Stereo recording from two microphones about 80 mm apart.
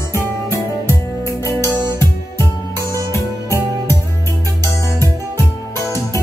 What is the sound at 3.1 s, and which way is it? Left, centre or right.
Music, left.